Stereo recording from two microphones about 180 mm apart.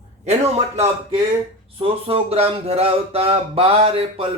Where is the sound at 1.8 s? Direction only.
30° right (ahead or behind).